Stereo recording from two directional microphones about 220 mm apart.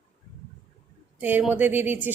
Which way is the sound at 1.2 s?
10° right (ahead or behind).